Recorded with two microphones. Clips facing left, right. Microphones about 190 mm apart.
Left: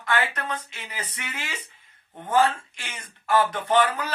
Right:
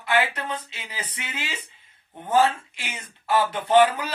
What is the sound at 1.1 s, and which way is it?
Speech, 25° right (ahead or behind).